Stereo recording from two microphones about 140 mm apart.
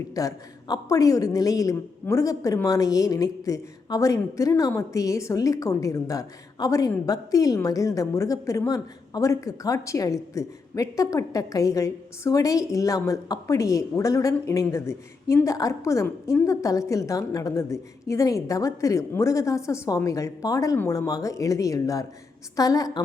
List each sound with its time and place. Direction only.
0.1 s a woman's voice: 25° left (ahead or behind)